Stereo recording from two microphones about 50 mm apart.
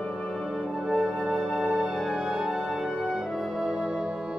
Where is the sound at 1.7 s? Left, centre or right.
Right.